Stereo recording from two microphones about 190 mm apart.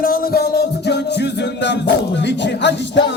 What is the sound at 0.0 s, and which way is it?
Music, 50° left (ahead or behind).